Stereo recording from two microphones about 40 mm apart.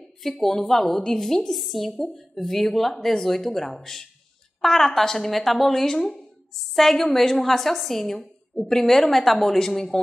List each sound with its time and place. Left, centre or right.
0.2 s a woman's voice: centre